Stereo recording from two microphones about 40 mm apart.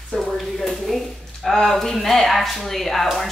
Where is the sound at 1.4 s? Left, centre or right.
Centre.